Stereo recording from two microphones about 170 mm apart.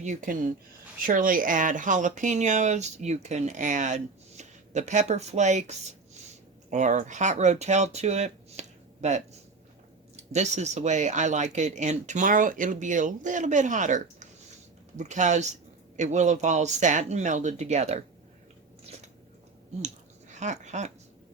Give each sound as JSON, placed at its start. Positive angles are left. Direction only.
{"t": 0.0, "sound": "speech", "side_deg": -45}
{"t": 10.3, "sound": "speech", "side_deg": -40}
{"t": 20.3, "sound": "speech", "side_deg": -45}